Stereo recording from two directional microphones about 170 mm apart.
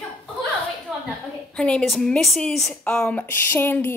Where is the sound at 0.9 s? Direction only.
5° right (ahead or behind).